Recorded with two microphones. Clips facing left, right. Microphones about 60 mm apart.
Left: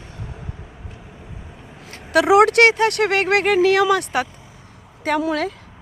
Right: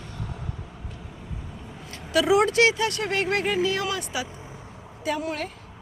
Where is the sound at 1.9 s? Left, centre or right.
Left.